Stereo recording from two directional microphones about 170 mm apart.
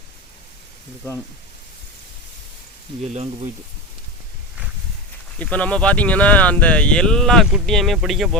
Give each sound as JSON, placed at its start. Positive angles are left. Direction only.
{"t": 3.0, "sound": "speech", "side_deg": -40}
{"t": 5.4, "sound": "speech", "side_deg": 10}